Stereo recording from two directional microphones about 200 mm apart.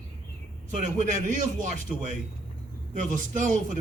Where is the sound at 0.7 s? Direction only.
40° right (ahead or behind).